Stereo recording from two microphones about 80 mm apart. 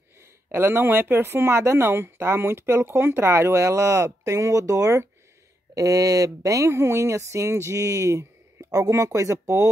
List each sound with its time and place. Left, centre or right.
0.5 s speech: right